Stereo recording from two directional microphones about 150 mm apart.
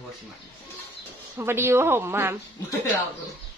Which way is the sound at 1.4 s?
15° right (ahead or behind).